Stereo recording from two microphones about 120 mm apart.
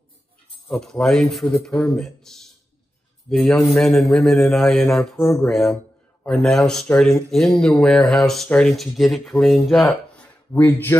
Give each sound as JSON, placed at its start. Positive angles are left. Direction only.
{"t": 0.7, "sound": "a man's voice", "side_deg": 5}
{"t": 10.2, "sound": "speech", "side_deg": 15}